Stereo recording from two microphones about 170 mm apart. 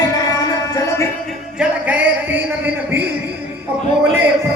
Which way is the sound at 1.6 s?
10° right (ahead or behind).